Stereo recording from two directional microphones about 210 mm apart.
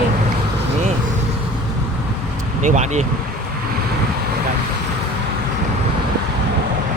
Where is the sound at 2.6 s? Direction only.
35° right (ahead or behind).